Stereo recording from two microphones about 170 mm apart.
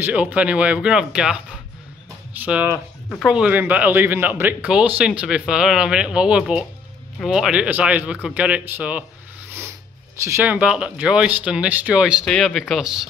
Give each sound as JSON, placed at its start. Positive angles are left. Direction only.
{"t": 0.0, "sound": "speech", "side_deg": -10}
{"t": 10.2, "sound": "speech", "side_deg": -15}